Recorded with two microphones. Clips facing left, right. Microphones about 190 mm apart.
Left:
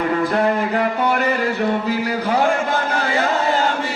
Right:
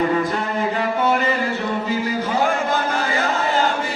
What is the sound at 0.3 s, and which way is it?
Music, 65° left (ahead or behind).